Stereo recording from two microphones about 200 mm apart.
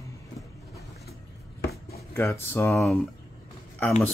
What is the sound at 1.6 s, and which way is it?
Chopping, 50° left (ahead or behind).